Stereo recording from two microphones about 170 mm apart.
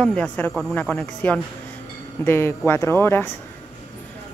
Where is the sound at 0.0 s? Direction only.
5° left (ahead or behind).